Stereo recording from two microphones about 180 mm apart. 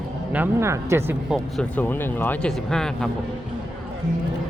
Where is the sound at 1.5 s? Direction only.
10° left (ahead or behind).